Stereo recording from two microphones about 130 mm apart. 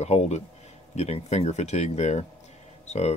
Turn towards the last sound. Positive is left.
turn(degrees=55)  # may be behind; listen again after turning